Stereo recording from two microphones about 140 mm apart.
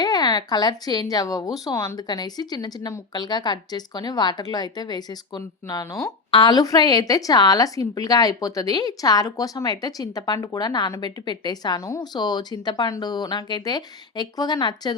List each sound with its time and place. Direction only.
0.0 s speech: 30° left (ahead or behind)